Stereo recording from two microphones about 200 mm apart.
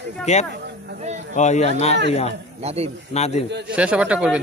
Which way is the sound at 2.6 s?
30° right (ahead or behind).